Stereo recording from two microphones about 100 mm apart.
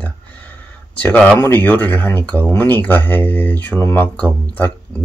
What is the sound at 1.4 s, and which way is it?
Speech, 15° left (ahead or behind).